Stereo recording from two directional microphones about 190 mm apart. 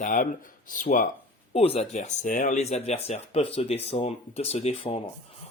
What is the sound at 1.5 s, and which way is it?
Speech, 30° left (ahead or behind).